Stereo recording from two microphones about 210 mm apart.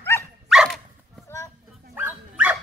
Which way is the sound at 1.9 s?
10° right (ahead or behind).